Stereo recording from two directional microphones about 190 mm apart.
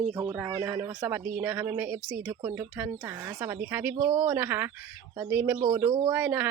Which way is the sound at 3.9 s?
30° right (ahead or behind).